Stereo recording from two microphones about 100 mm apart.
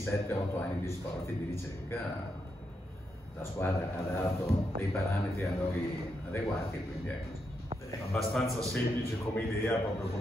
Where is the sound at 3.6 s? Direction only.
25° left (ahead or behind).